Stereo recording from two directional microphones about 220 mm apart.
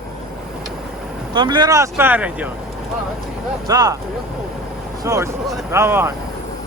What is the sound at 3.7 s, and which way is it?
Speech, 15° right (ahead or behind).